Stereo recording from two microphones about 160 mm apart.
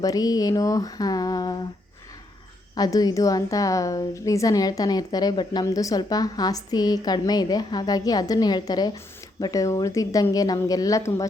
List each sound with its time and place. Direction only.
0.0 s a woman's voice: 25° left (ahead or behind)
2.7 s a woman's voice: 25° left (ahead or behind)